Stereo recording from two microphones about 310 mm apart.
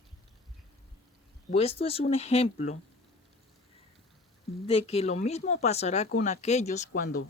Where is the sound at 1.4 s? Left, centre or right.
Centre.